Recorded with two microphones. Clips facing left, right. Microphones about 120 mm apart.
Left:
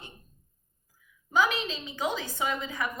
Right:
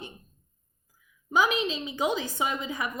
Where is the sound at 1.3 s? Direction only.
15° right (ahead or behind).